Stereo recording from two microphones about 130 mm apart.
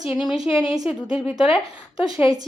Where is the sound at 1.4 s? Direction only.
45° left (ahead or behind).